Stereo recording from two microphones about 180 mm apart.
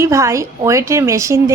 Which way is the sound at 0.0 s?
15° right (ahead or behind).